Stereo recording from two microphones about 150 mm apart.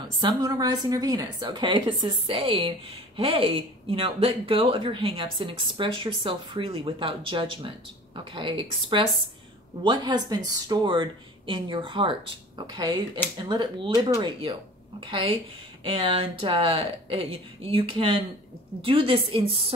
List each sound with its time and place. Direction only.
0.2 s a woman's voice: 25° right (ahead or behind)